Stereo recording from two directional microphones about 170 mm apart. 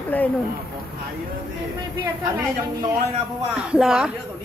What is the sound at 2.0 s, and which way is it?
Speech, 20° right (ahead or behind).